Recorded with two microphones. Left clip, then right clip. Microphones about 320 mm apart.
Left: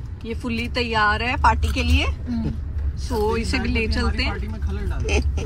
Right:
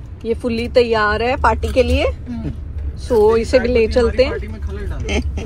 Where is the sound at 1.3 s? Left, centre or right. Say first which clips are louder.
Right 4 dB; centre.